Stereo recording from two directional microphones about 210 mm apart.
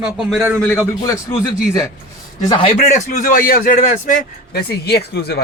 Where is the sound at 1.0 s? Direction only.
15° left (ahead or behind).